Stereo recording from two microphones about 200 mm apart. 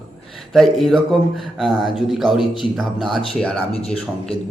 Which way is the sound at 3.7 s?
30° left (ahead or behind).